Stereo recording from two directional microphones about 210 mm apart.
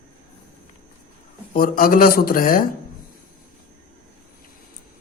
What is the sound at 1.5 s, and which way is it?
A woman's voice, 40° left (ahead or behind).